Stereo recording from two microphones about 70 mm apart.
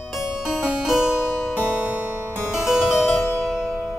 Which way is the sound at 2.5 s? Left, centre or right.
Centre.